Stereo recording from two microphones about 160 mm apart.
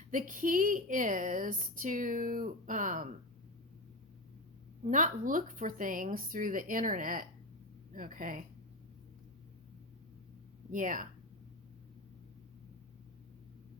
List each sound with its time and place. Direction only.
0.1 s a woman's voice: 55° right (ahead or behind)
4.9 s a woman's voice: 50° right (ahead or behind)
10.7 s a woman's voice: 55° right (ahead or behind)